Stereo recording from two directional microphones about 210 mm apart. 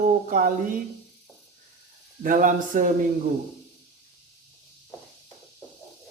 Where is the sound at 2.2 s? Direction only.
40° right (ahead or behind).